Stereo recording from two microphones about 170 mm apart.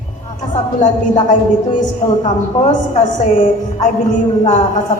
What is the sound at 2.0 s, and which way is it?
Speech, 20° left (ahead or behind).